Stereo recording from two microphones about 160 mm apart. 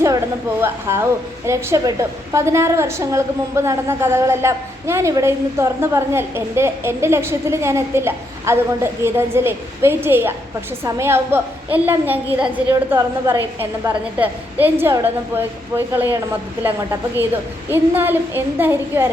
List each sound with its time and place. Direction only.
0.6 s a woman's voice: 15° right (ahead or behind)